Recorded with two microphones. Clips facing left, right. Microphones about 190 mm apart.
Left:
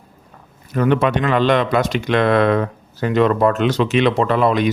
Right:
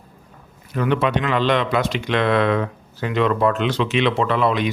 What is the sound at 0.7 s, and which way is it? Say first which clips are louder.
Speech: left 3 dB; 45° left (ahead or behind).